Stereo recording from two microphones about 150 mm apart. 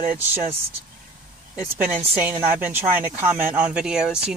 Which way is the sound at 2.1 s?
15° right (ahead or behind).